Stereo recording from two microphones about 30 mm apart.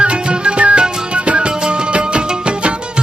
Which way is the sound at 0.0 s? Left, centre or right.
Right.